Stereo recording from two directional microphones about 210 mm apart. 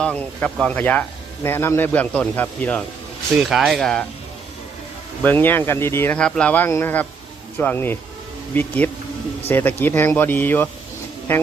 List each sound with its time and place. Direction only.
0.0 s speech: 5° left (ahead or behind)
5.2 s speech: 10° left (ahead or behind)